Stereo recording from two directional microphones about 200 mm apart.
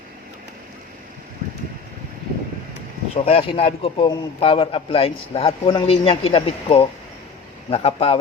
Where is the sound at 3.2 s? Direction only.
30° left (ahead or behind).